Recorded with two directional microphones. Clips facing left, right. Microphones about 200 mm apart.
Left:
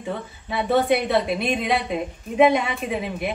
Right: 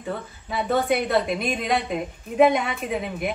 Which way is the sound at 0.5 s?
Centre (ahead or behind).